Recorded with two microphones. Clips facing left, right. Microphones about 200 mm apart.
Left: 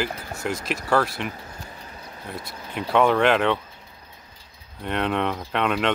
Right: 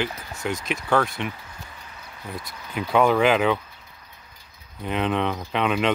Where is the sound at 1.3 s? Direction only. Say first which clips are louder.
Left 3 dB; 40° left (ahead or behind).